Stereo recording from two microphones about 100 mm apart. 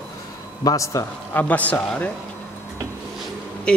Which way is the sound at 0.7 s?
30° left (ahead or behind).